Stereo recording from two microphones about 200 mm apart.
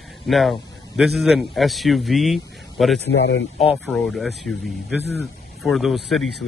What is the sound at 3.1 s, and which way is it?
Speech, 55° left (ahead or behind).